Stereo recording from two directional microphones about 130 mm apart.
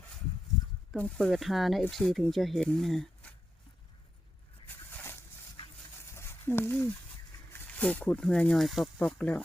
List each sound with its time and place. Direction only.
0.9 s speech: 10° left (ahead or behind)
4.6 s a sound: 15° left (ahead or behind)
7.5 s speech: 10° left (ahead or behind)